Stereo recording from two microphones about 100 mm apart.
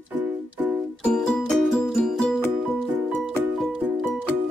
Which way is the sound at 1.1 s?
Centre (ahead or behind).